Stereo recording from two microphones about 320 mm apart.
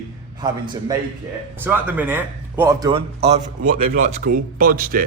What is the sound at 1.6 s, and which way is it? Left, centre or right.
Speech, centre.